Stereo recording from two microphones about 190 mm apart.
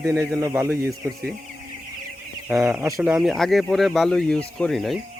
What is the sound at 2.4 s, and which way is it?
Speech, 5° right (ahead or behind).